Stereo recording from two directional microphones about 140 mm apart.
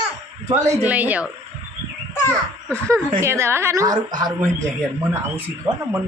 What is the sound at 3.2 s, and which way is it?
A woman's voice, 20° right (ahead or behind).